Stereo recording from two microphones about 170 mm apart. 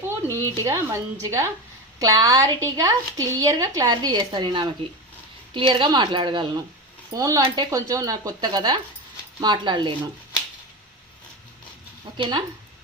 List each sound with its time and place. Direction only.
0.3 s a sound: 15° left (ahead or behind)
0.6 s a woman's voice: 20° right (ahead or behind)
12.1 s speech: 30° right (ahead or behind)